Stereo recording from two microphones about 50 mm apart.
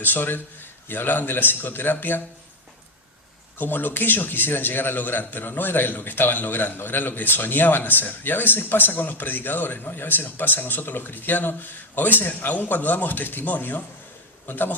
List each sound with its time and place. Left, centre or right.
0.0 s a man's voice: left
3.6 s a man's voice: left